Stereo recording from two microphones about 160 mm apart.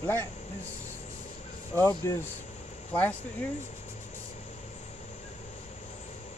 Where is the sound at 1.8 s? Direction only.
20° left (ahead or behind).